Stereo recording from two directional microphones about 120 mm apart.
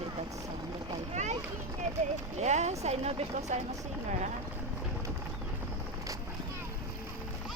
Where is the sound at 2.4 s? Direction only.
70° right (ahead or behind).